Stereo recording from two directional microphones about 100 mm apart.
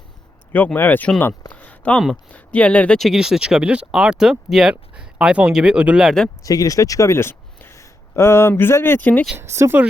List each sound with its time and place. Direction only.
0.5 s speech: 20° left (ahead or behind)
1.5 s a sound: 15° left (ahead or behind)
2.3 s speech: 15° left (ahead or behind)
3.0 s speech: 5° right (ahead or behind)
6.4 s speech: 35° left (ahead or behind); by 9.2 s 15° left (ahead or behind)
9.4 s speech: 25° right (ahead or behind)